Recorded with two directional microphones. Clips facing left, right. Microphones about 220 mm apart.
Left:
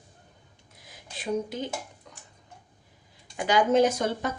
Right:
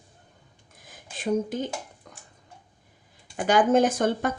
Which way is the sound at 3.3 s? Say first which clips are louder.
Right 2 dB; 50° right (ahead or behind).